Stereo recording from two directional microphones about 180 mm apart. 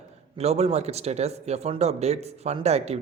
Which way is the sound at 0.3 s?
35° right (ahead or behind).